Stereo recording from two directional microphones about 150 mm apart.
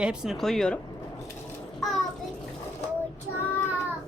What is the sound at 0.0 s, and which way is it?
Speech, 5° right (ahead or behind).